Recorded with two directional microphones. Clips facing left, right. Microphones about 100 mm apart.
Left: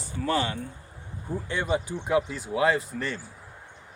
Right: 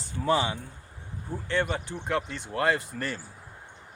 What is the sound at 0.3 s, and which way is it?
Speech, 15° right (ahead or behind).